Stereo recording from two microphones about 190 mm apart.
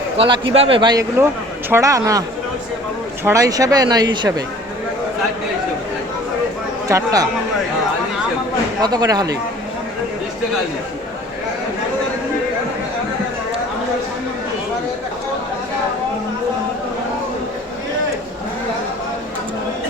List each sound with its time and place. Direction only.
0.2 s a man's voice: 30° right (ahead or behind)
3.2 s speech: 20° right (ahead or behind)
6.8 s a man's voice: 15° right (ahead or behind)
8.8 s speech: 20° right (ahead or behind)